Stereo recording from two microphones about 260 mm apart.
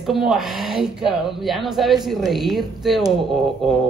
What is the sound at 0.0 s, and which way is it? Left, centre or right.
Speech, centre.